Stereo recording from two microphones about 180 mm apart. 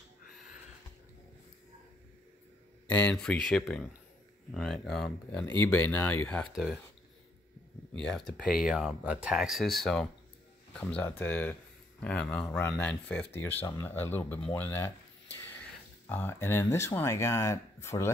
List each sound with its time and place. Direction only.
2.9 s speech: 10° left (ahead or behind)
7.9 s speech: 5° left (ahead or behind)
16.1 s speech: 10° left (ahead or behind)